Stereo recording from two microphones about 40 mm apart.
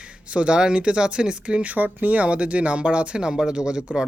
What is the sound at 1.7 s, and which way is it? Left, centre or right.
Speech, right.